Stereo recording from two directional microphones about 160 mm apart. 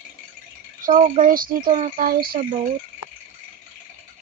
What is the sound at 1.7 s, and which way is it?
Speech, 50° right (ahead or behind).